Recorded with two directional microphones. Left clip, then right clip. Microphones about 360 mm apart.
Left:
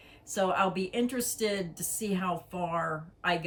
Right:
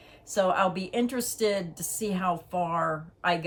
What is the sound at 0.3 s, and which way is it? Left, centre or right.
A woman's voice, centre.